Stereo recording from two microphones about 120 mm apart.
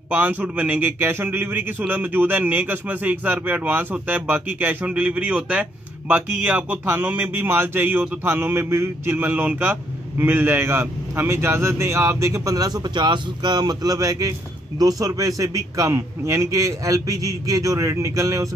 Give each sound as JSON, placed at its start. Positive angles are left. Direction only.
{"t": 0.1, "sound": "a man's voice", "side_deg": -15}